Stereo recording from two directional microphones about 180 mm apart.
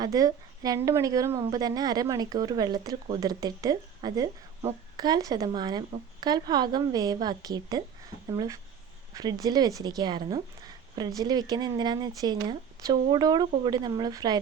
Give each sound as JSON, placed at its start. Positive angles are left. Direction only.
{"t": 0.0, "sound": "a woman's voice", "side_deg": -20}